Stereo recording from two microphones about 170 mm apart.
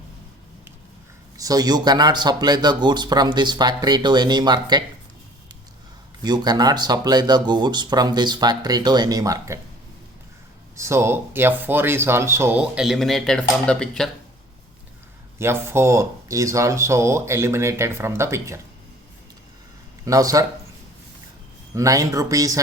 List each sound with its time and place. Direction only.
1.4 s speech: 20° right (ahead or behind)
6.2 s speech: 25° right (ahead or behind)
10.8 s speech: 15° right (ahead or behind); by 14.1 s 5° left (ahead or behind)
15.4 s speech: 15° right (ahead or behind)
20.1 s speech: 20° right (ahead or behind)
21.8 s speech: 20° right (ahead or behind)